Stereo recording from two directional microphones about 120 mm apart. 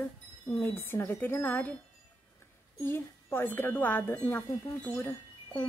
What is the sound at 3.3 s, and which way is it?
Chime, 20° left (ahead or behind).